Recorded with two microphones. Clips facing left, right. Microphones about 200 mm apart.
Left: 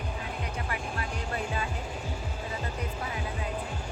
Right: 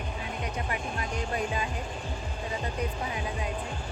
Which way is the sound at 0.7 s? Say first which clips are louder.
Right 2 dB; 15° right (ahead or behind).